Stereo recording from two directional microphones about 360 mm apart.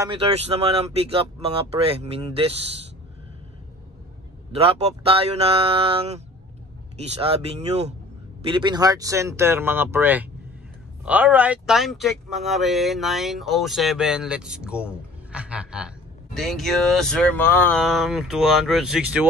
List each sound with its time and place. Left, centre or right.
0.0 s speech: centre
4.5 s a man's voice: centre